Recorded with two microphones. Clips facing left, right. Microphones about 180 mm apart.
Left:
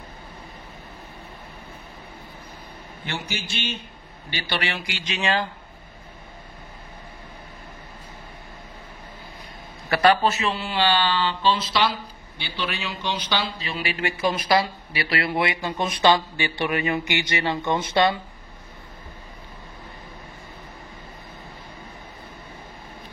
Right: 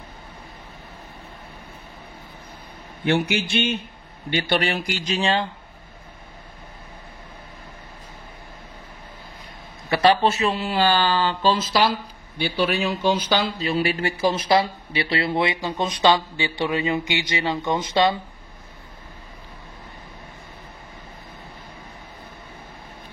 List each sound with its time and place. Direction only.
3.1 s a man's voice: 60° right (ahead or behind); by 5.5 s 30° right (ahead or behind)
9.8 s a man's voice: 20° right (ahead or behind)
10.3 s a man's voice: 35° right (ahead or behind); by 18.1 s 15° right (ahead or behind)